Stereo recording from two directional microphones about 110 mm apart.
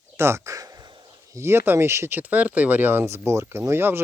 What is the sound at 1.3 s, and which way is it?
Speech, 25° right (ahead or behind).